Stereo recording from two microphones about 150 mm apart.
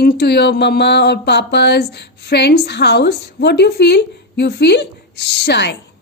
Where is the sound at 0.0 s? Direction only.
85° left.